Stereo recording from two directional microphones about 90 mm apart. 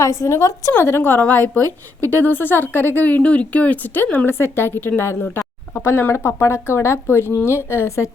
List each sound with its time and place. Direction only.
0.0 s a woman's voice: 30° left (ahead or behind)